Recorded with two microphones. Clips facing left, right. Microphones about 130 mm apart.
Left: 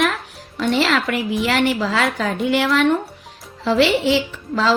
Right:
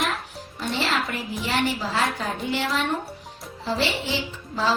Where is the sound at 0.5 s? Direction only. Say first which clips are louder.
Left 8 dB; 85° left.